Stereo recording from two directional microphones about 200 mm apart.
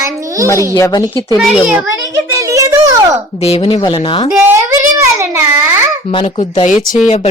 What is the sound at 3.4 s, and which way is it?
Speech, 30° left (ahead or behind).